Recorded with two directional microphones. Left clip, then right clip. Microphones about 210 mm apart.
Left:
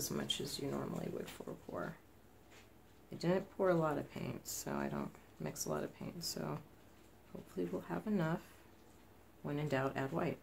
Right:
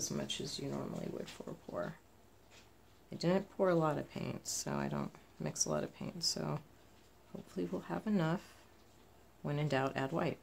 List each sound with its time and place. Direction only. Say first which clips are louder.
0.0 s speech: even; 30° right (ahead or behind)
3.2 s speech: right 2 dB; 35° right (ahead or behind)